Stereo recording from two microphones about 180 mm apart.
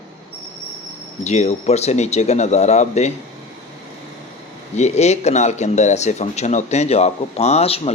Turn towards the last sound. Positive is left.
turn(degrees=35)  # may be behind; listen again after turning